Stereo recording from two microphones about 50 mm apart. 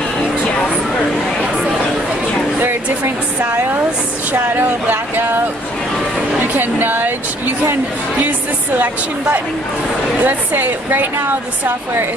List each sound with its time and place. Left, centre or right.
4.3 s speech: right
6.4 s speech: right